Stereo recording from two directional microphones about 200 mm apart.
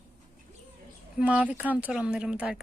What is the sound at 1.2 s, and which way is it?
A woman's voice, 5° right (ahead or behind).